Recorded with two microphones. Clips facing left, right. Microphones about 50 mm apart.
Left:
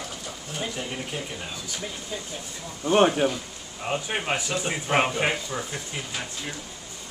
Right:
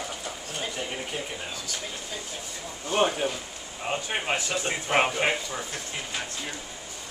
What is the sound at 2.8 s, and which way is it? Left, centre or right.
Speech, left.